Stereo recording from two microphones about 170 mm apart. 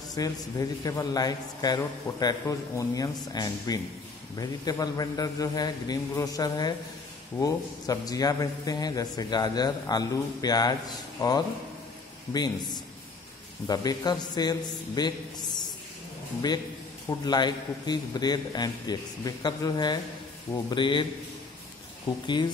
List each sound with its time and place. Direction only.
0.1 s a man's voice: 20° left (ahead or behind)
17.2 s a man's voice: 25° left (ahead or behind)
22.2 s a man's voice: 25° left (ahead or behind)